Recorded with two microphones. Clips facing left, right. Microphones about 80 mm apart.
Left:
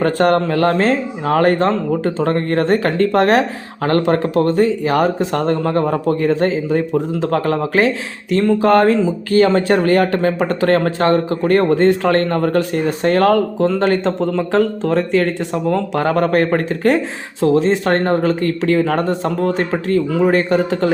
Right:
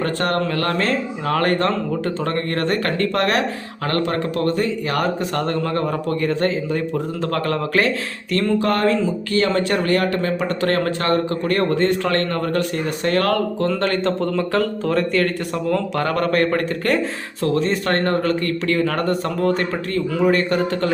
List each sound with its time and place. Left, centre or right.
0.0 s speech: left
0.3 s speech: left
1.3 s speech: centre
8.7 s speech: left
14.2 s speech: centre